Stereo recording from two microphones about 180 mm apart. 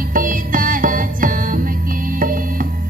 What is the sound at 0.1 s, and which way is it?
Music, 50° right (ahead or behind).